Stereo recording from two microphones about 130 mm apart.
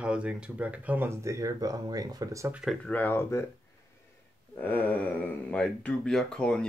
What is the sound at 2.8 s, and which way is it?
Speech, 15° left (ahead or behind).